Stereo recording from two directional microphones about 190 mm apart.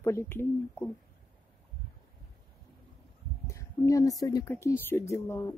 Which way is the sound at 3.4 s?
15° left (ahead or behind).